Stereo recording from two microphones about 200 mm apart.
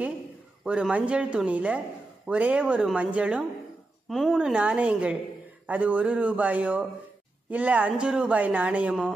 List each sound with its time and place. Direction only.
0.7 s speech: 5° right (ahead or behind)